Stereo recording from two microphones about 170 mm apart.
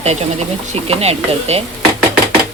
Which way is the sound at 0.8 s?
35° right (ahead or behind).